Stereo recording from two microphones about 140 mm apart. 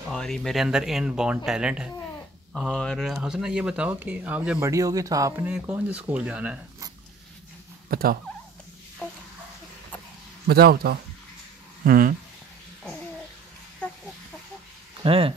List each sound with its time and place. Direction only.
0.1 s speech: centre (ahead or behind)
4.6 s speech: 25° right (ahead or behind); by 6.6 s 10° right (ahead or behind)
7.9 s speech: 90° right
9.0 s a sound: 10° left (ahead or behind)
10.4 s speech: 90° right
15.0 s speech: 40° right (ahead or behind)